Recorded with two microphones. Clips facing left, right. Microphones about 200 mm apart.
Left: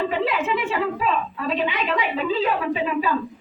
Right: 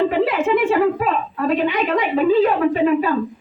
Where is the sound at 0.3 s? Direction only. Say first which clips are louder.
Right 6 dB; 55° right (ahead or behind).